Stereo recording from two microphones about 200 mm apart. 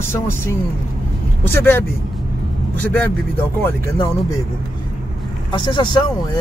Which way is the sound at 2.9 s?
10° left (ahead or behind).